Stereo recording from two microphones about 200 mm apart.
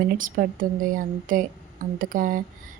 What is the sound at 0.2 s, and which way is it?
Speech, 40° right (ahead or behind).